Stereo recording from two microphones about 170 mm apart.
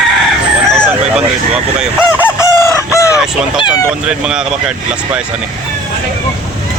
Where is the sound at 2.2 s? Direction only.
15° left (ahead or behind).